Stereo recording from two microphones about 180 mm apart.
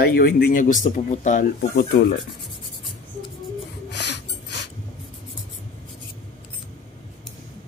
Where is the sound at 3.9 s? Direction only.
70° left (ahead or behind).